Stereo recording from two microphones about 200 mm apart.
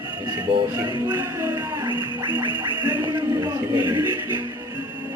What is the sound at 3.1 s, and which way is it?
Music, 20° right (ahead or behind).